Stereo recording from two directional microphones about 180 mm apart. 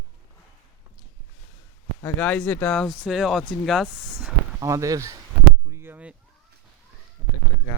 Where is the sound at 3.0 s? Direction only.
Centre (ahead or behind).